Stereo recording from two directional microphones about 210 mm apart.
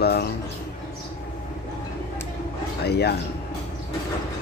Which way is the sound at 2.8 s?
50° left (ahead or behind).